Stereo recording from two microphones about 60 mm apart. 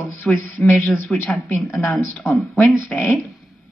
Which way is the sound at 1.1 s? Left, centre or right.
Centre.